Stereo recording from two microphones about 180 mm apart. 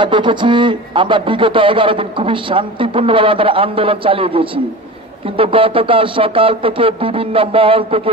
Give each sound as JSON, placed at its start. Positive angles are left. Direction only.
{"t": 0.0, "sound": "a man's voice", "side_deg": -25}